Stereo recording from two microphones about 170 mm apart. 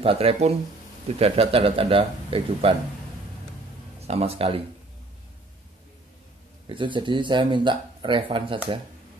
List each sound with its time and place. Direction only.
0.0 s a man's voice: 35° right (ahead or behind)
4.1 s a man's voice: 35° right (ahead or behind)
6.7 s speech: 30° right (ahead or behind)